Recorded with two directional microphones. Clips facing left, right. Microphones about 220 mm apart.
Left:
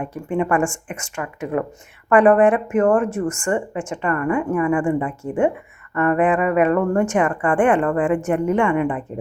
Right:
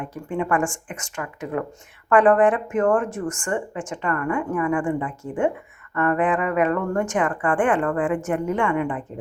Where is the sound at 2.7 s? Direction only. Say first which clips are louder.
Left 3 dB; 20° left (ahead or behind).